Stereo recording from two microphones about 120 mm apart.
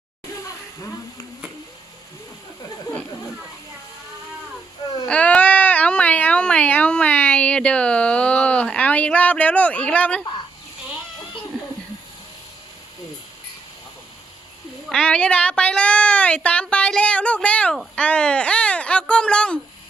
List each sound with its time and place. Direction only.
5.0 s baby cry: 10° left (ahead or behind)
14.8 s a child's voice: 5° left (ahead or behind)